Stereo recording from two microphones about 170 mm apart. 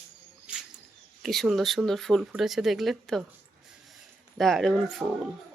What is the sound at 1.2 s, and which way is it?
Speech, centre (ahead or behind).